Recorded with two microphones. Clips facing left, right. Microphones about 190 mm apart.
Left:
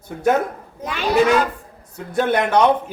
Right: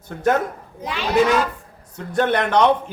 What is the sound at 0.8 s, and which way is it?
Speech, 50° left (ahead or behind).